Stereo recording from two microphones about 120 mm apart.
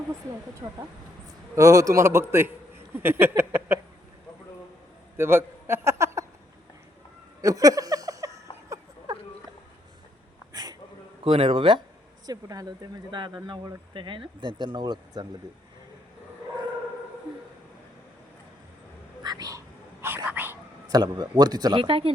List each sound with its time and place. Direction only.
0.6 s speech: 40° right (ahead or behind)
1.5 s a man's voice: 25° right (ahead or behind)
5.1 s a sound: 20° right (ahead or behind)
7.4 s a sound: 30° right (ahead or behind)
10.5 s a sound: 35° right (ahead or behind)
11.2 s speech: 50° right (ahead or behind)
12.2 s speech: 30° right (ahead or behind)
19.2 s whispering: 35° right (ahead or behind); by 20.6 s 15° right (ahead or behind)
20.8 s speech: 35° right (ahead or behind)
21.8 s speech: 50° right (ahead or behind)